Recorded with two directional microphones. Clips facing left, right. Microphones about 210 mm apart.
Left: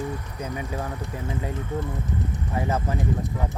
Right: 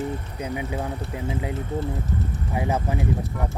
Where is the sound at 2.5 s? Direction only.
15° right (ahead or behind).